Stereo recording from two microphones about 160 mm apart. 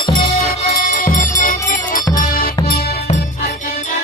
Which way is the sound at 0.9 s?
55° left (ahead or behind).